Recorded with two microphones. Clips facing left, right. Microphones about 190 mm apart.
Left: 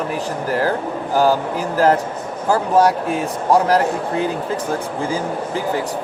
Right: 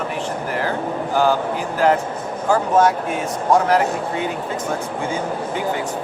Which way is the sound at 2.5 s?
35° left (ahead or behind).